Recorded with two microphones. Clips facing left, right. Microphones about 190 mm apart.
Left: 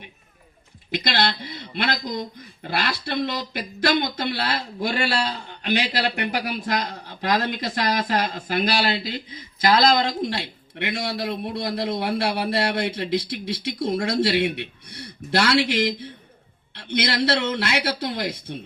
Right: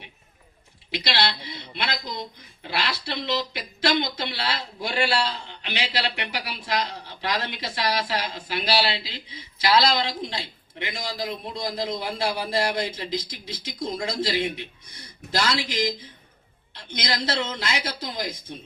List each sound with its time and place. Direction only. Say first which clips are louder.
0.9 s speech: left 3 dB; 50° left (ahead or behind)
10.2 s a man's voice: left 6 dB; 65° left (ahead or behind)